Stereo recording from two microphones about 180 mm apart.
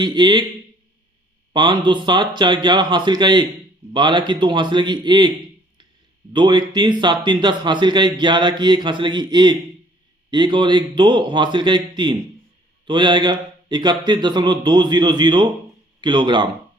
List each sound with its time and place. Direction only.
0.0 s speech: 25° right (ahead or behind)
1.5 s speech: 25° right (ahead or behind)
6.3 s speech: 25° right (ahead or behind)